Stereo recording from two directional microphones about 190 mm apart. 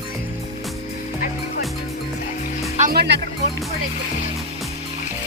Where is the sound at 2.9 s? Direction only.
60° right (ahead or behind).